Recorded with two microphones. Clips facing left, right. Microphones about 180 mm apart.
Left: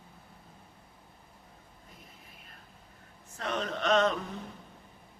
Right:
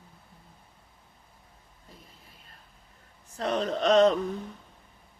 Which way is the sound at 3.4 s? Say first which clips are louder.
Right 6 dB; 30° right (ahead or behind).